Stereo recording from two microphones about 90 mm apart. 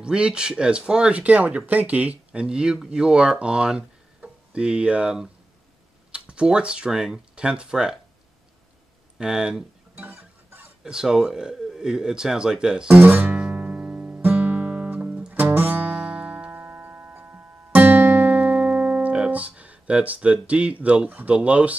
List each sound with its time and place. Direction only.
0.0 s speech: 10° right (ahead or behind)
9.2 s speech: 5° right (ahead or behind)
9.9 s a sound: 20° right (ahead or behind)
10.8 s speech: 5° right (ahead or behind)
13.0 s guitar: 20° right (ahead or behind)
20.8 s speech: 15° right (ahead or behind)